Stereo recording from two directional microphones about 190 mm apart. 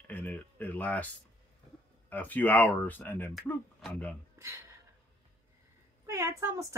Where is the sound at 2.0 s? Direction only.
10° left (ahead or behind).